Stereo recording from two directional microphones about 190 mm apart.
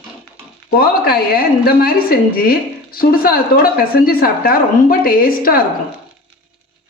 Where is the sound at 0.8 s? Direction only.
50° left (ahead or behind).